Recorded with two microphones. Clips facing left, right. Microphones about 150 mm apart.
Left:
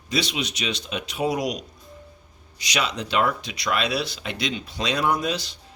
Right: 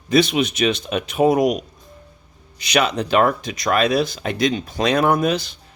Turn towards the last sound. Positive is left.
turn(degrees=-55)  # may be behind; listen again after turning